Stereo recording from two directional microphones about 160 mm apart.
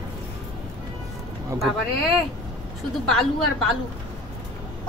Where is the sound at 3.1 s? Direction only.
5° left (ahead or behind).